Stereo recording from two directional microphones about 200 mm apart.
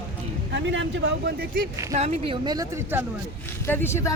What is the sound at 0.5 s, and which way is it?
Speech, 65° right (ahead or behind).